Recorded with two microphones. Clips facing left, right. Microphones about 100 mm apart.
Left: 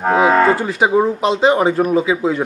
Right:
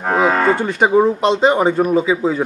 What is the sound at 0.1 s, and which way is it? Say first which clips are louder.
Speech: left 2 dB; 5° left (ahead or behind).